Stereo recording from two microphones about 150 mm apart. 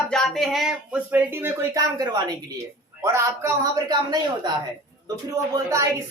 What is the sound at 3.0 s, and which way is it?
A man's voice, 20° right (ahead or behind).